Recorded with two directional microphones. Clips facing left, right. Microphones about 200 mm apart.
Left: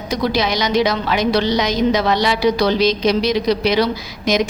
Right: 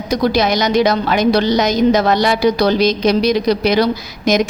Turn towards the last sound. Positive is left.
turn(degrees=-45)  # may be behind; listen again after turning